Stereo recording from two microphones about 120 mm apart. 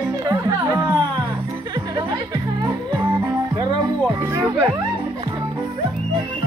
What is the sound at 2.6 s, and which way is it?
Music, 20° right (ahead or behind).